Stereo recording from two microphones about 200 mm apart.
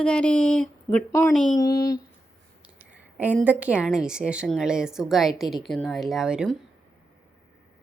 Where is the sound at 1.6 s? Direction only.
15° left (ahead or behind).